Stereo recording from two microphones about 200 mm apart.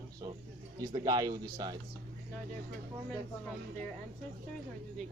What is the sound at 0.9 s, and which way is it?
Speech, 20° right (ahead or behind).